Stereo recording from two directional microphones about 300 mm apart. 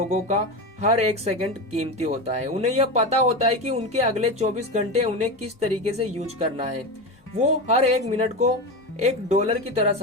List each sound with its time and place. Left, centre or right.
0.1 s speech: right